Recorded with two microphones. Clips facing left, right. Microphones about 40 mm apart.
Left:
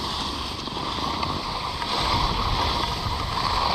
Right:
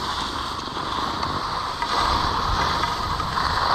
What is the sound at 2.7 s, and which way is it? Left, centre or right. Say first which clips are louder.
Vehicle: right 3 dB; right.